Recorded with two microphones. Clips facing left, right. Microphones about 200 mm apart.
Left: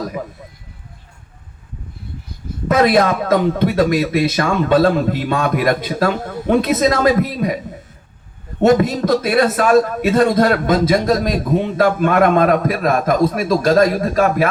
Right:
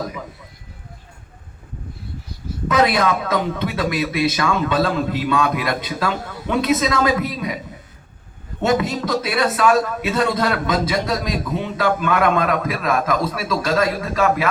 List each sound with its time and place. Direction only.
2.6 s a man's voice: 50° left (ahead or behind)
8.6 s a man's voice: 45° left (ahead or behind)